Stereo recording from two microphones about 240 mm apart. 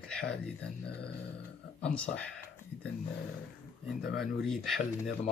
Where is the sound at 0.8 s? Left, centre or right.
Left.